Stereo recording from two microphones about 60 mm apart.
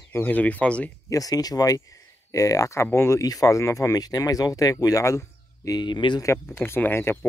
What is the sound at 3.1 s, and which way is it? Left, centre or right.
Speech, left.